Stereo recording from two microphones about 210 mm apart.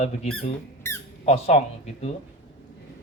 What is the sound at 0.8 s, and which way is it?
Squeak, 10° left (ahead or behind).